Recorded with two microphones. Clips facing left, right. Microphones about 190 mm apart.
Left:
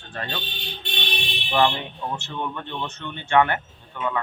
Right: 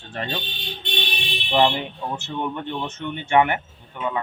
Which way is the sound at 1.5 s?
20° right (ahead or behind).